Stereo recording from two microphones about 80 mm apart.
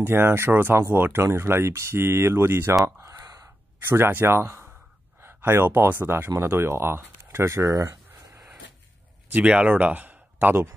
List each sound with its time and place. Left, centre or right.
0.0 s speech: right
2.8 s a sound: right
3.8 s speech: right
9.3 s speech: centre